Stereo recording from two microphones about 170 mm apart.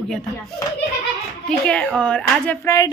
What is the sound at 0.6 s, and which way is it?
Speech, 20° left (ahead or behind).